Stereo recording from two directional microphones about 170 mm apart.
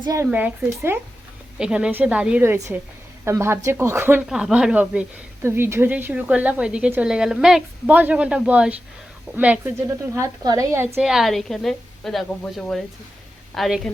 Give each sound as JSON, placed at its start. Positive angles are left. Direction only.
{"t": 0.0, "sound": "speech", "side_deg": -20}
{"t": 0.3, "sound": "a woman's voice", "side_deg": -10}
{"t": 4.3, "sound": "a woman's voice", "side_deg": -5}
{"t": 11.0, "sound": "a woman's voice", "side_deg": 0}